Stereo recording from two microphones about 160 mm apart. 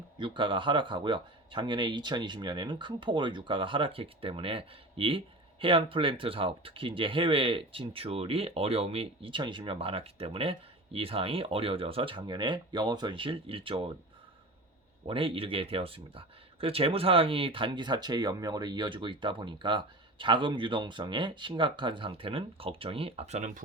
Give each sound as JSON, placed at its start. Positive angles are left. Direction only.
{"t": 0.2, "sound": "speech", "side_deg": -30}
{"t": 15.0, "sound": "speech", "side_deg": -35}